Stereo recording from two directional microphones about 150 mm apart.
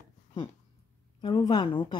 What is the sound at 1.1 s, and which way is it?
Speech, 30° left (ahead or behind).